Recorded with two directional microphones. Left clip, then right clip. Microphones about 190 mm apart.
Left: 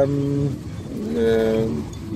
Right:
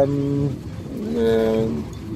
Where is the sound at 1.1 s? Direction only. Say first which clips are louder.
Even; 5° left (ahead or behind).